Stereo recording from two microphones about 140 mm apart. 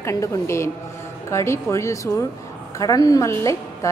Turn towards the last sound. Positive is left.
turn(degrees=20)  # may be behind; listen again after turning